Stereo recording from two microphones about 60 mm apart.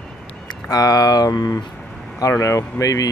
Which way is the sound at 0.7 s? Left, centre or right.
Left.